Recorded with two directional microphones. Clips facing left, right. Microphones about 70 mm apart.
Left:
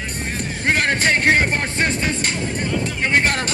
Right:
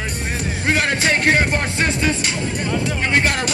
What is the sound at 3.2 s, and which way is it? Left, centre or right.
Music, left.